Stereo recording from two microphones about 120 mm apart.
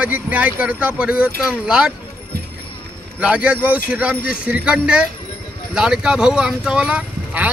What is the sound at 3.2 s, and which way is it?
Speech, 10° right (ahead or behind).